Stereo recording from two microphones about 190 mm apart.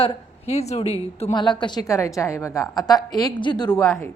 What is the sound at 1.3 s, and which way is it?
A woman's voice, 25° left (ahead or behind).